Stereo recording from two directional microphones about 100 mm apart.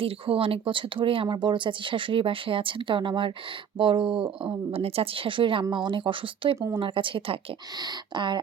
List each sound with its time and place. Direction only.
0.0 s speech: 70° right (ahead or behind)
7.8 s speech: 50° right (ahead or behind)